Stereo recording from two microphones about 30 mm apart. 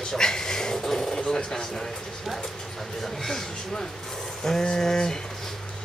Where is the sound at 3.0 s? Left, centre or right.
Centre.